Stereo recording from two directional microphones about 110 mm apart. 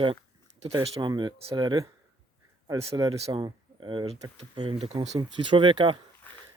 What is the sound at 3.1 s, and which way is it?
Speech, 50° right (ahead or behind).